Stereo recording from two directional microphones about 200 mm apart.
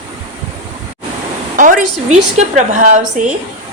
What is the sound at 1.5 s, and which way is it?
A woman's voice, 40° right (ahead or behind).